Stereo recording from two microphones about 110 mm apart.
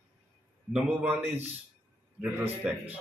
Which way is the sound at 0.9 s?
20° right (ahead or behind).